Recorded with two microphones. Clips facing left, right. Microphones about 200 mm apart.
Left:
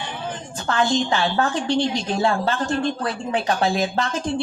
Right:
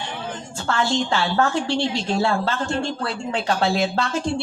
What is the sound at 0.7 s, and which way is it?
A woman's voice, 20° left (ahead or behind).